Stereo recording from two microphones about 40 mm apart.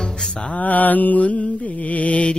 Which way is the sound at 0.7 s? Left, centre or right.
Left.